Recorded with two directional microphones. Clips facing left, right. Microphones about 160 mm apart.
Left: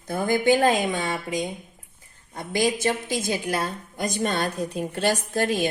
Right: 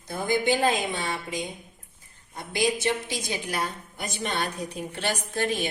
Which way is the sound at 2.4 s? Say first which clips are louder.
Left 3 dB; 50° left (ahead or behind).